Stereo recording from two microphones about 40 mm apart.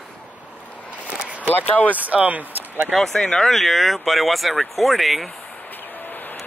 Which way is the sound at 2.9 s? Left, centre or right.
Centre.